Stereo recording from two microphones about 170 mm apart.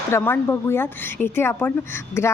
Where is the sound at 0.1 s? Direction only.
15° left (ahead or behind).